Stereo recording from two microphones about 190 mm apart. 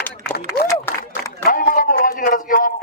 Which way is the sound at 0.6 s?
15° left (ahead or behind).